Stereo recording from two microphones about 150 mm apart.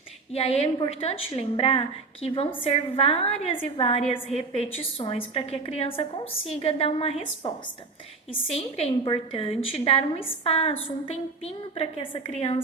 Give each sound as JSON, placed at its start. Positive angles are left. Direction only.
{"t": 0.3, "sound": "a woman's voice", "side_deg": 40}